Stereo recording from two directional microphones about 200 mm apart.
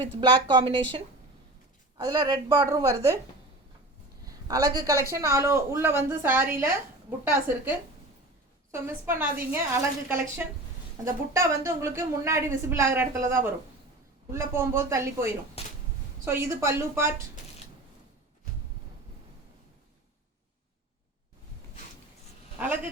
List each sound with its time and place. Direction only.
0.2 s a woman's voice: 20° right (ahead or behind)
4.3 s a woman's voice: 15° right (ahead or behind)
15.6 s a sound: 30° left (ahead or behind)
16.2 s a woman's voice: 10° right (ahead or behind)
22.5 s speech: 5° right (ahead or behind)